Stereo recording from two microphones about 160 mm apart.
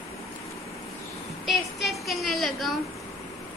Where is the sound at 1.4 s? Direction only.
Centre (ahead or behind).